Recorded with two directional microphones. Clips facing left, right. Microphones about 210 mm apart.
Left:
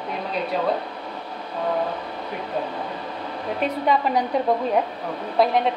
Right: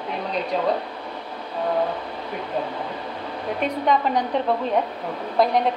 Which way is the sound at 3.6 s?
5° left (ahead or behind).